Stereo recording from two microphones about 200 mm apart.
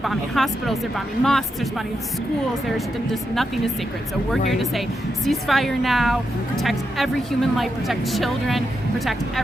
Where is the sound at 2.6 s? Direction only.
Centre (ahead or behind).